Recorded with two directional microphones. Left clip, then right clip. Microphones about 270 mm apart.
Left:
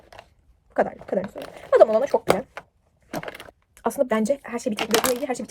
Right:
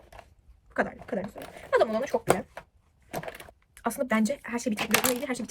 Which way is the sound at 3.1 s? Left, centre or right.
Centre.